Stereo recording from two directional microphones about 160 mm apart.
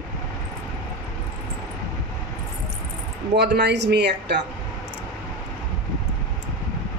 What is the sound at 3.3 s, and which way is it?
Speech, 90° right.